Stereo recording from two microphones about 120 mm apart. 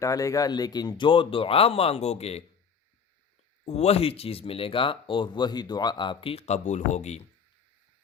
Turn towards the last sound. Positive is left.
turn(degrees=75)  # may be behind; listen again after turning